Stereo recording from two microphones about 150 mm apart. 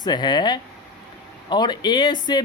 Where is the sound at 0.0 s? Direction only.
30° left (ahead or behind).